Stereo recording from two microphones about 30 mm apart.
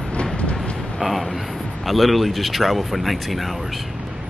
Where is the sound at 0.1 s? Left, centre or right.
Left.